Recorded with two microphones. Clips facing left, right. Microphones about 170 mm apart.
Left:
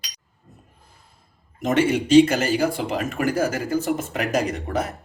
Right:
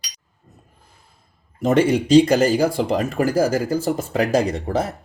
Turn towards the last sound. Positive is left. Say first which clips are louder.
# right 3 dB
turn(degrees=-30)  # may be behind; listen again after turning